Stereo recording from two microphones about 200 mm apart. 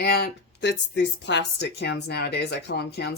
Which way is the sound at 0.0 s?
55° left (ahead or behind).